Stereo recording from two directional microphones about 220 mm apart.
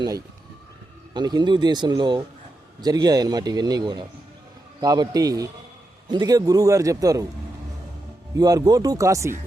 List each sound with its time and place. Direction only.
1.1 s a man's voice: 20° right (ahead or behind)
8.4 s a man's voice: 15° right (ahead or behind)